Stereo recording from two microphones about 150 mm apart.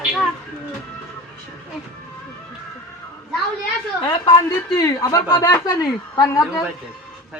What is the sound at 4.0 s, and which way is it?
Speech, 30° left (ahead or behind).